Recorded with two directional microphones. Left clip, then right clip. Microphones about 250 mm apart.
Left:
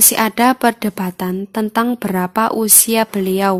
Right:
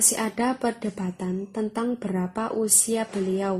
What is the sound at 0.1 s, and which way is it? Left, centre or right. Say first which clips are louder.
A woman's voice: left 12 dB; left.